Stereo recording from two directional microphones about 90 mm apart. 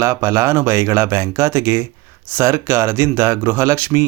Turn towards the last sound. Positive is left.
turn(degrees=-25)  # may be behind; listen again after turning